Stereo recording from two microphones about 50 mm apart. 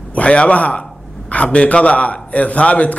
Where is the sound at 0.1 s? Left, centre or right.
Left.